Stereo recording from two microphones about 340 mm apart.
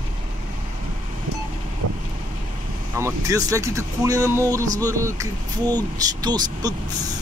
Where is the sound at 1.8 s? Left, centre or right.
Right.